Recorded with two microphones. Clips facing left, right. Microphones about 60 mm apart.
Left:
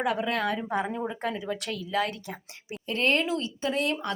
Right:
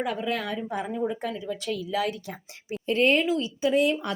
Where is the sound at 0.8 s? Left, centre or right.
Left.